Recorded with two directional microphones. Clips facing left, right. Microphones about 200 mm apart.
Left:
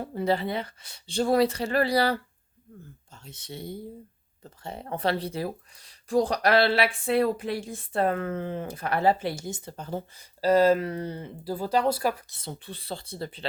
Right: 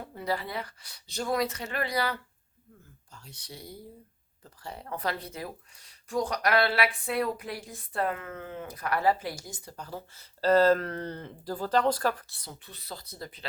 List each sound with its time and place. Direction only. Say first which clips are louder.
0.0 s speech: left 6 dB; 30° left (ahead or behind)
10.4 s speech: left 2 dB; 10° left (ahead or behind)
12.3 s speech: left 8 dB; 25° left (ahead or behind)